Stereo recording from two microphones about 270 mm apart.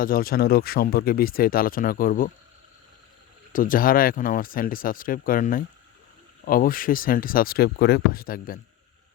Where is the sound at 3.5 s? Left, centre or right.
Left.